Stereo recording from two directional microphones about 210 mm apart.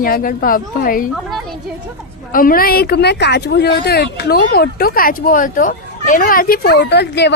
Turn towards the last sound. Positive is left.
turn(degrees=55)  # may be behind; listen again after turning